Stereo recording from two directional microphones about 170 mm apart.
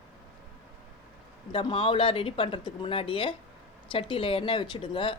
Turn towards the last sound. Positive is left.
turn(degrees=30)  # may be behind; listen again after turning